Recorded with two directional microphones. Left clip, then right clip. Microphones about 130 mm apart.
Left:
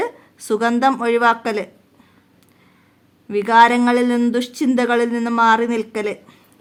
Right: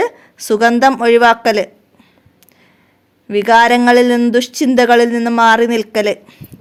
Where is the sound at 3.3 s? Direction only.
40° right (ahead or behind).